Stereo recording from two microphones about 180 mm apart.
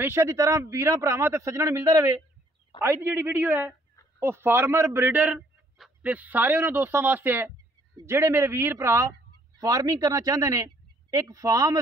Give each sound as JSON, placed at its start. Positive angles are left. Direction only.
{"t": 0.0, "sound": "a man's voice", "side_deg": -15}